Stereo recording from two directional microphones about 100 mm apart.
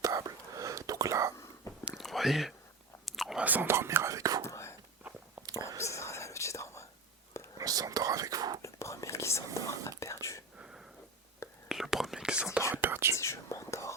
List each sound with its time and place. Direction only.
0.0 s whispering: 35° right (ahead or behind)
1.9 s chewing: centre (ahead or behind)
3.4 s whispering: 20° right (ahead or behind); by 4.4 s 35° right (ahead or behind)
4.4 s whispering: 30° left (ahead or behind)
7.6 s whispering: 40° right (ahead or behind)
8.6 s whispering: 30° left (ahead or behind)
9.6 s speech: 30° left (ahead or behind)
10.0 s whispering: 30° left (ahead or behind)
10.6 s a sound: 5° right (ahead or behind)
11.7 s whispering: 5° right (ahead or behind)
12.7 s whispering: 20° right (ahead or behind)
13.1 s whispering: 30° left (ahead or behind)